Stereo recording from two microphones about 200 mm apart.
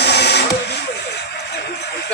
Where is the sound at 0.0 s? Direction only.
55° left (ahead or behind).